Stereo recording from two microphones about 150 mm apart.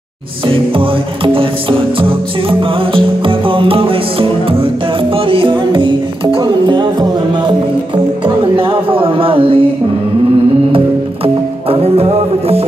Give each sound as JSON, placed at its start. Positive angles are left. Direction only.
{"t": 0.5, "sound": "music", "side_deg": -35}
{"t": 11.7, "sound": "music", "side_deg": -40}